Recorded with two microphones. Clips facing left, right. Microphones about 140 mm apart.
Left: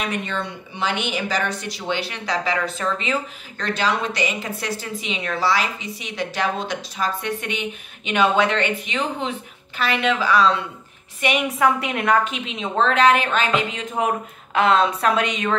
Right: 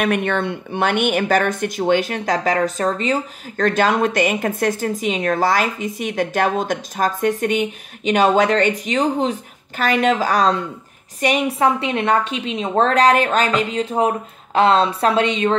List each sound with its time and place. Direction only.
0.0 s a woman's voice: 60° right (ahead or behind); by 15.5 s 30° right (ahead or behind)